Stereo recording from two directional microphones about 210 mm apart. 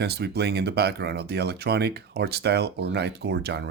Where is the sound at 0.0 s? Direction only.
50° right (ahead or behind).